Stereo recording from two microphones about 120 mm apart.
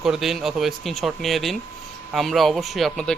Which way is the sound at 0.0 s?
5° right (ahead or behind).